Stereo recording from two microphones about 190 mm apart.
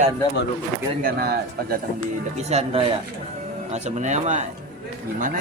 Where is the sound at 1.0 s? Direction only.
50° right (ahead or behind).